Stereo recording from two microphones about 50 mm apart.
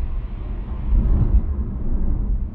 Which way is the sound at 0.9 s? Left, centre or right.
Centre.